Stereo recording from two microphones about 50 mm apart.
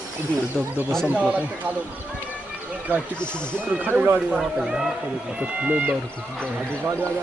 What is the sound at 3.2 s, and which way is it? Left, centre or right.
Speech, left.